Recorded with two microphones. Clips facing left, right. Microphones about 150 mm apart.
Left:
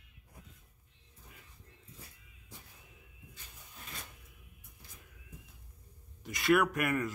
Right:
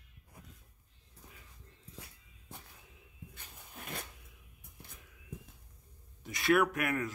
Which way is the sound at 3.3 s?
55° right (ahead or behind).